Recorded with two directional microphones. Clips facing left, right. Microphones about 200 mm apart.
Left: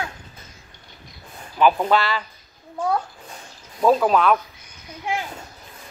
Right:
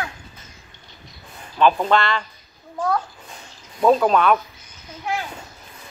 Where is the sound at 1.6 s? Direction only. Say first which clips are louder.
Even; 10° left (ahead or behind).